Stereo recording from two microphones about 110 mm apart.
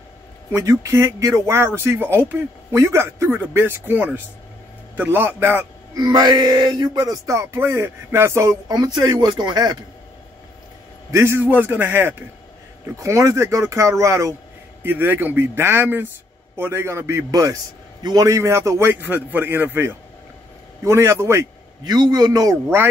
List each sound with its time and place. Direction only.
0.5 s a man's voice: 30° right (ahead or behind)
5.9 s music: 40° right (ahead or behind)
11.1 s speech: 25° right (ahead or behind)
17.3 s music: 30° right (ahead or behind)
18.0 s speech: 30° right (ahead or behind)
21.8 s music: 40° right (ahead or behind)